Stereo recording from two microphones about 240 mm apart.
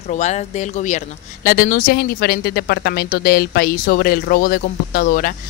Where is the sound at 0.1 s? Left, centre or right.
Left.